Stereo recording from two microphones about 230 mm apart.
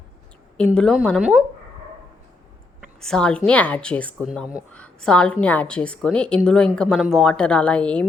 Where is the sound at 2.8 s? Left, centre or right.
Centre.